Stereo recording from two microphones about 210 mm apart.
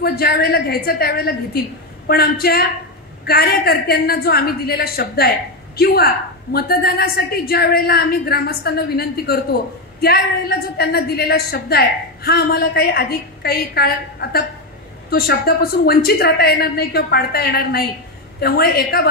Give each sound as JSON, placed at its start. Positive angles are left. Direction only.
{"t": 0.0, "sound": "a woman's voice", "side_deg": 45}